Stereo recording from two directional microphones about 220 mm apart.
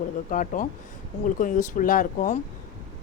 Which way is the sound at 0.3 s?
35° left (ahead or behind).